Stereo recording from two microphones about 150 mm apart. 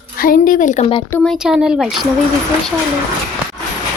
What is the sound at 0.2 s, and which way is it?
Speech, 65° left (ahead or behind).